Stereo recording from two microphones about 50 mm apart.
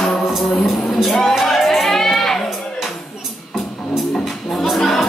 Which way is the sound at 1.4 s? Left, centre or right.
Centre.